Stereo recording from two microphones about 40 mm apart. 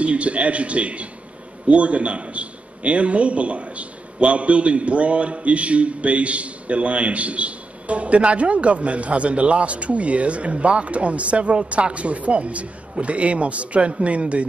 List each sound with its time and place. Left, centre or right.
0.0 s a man's voice: right